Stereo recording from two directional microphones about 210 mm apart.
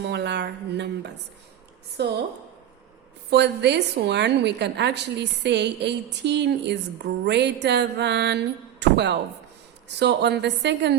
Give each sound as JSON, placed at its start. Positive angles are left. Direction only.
{"t": 0.0, "sound": "a woman's voice", "side_deg": -55}
{"t": 3.2, "sound": "a woman's voice", "side_deg": -55}